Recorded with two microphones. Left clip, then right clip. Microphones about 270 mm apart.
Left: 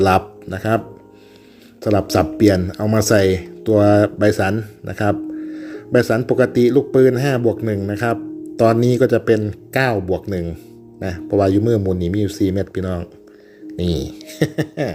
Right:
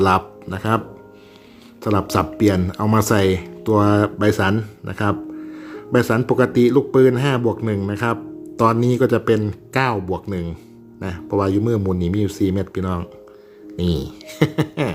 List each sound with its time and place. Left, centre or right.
0.0 s speech: centre
1.8 s speech: centre
11.6 s a man's voice: right
11.9 s speech: centre